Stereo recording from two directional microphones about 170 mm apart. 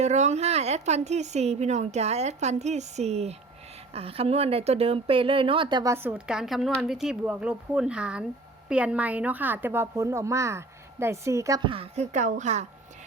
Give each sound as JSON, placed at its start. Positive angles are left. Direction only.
{"t": 0.0, "sound": "a woman's voice", "side_deg": -40}
{"t": 11.7, "sound": "speech", "side_deg": -35}